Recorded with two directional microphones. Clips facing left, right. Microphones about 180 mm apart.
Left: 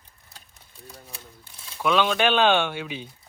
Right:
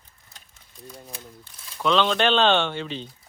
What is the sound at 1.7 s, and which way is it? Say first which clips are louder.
Speech: right 1 dB; 5° left (ahead or behind).